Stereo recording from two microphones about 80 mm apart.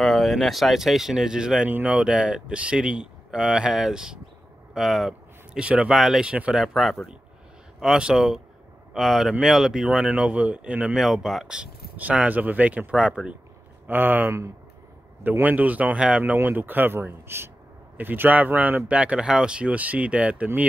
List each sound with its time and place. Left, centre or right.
0.0 s speech: centre
4.7 s a sound: centre
5.6 s speech: centre
11.0 s speech: centre
13.8 s speech: right